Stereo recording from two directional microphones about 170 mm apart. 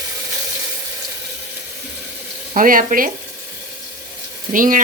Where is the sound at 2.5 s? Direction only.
55° right (ahead or behind).